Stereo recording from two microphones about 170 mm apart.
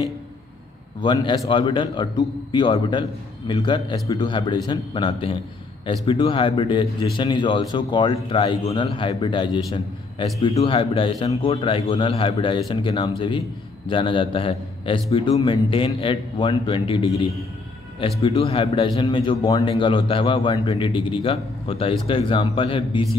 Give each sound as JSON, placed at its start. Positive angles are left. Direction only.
{"t": 1.0, "sound": "a man's voice", "side_deg": 25}